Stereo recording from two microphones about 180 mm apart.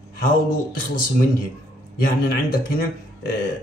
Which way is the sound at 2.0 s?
55° left (ahead or behind).